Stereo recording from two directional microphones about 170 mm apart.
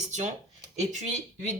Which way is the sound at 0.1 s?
45° right (ahead or behind).